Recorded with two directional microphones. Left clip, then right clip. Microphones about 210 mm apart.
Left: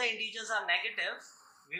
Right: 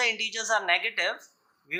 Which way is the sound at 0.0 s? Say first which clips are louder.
Right 7 dB; 40° right (ahead or behind).